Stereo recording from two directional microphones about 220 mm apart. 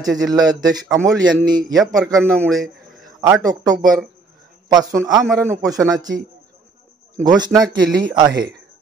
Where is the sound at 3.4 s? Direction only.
15° right (ahead or behind).